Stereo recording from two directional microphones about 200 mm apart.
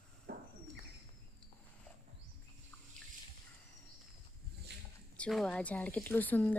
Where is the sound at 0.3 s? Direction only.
55° right (ahead or behind).